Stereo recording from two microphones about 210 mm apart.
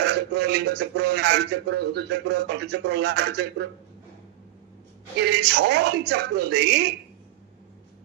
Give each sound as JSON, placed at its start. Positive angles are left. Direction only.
{"t": 0.0, "sound": "speech", "side_deg": -55}
{"t": 5.2, "sound": "speech", "side_deg": -55}